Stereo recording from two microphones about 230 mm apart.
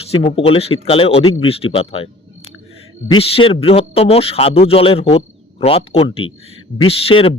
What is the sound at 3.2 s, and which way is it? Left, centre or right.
A man's voice, left.